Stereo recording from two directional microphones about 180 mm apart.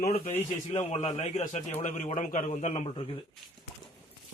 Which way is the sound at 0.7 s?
40° left (ahead or behind).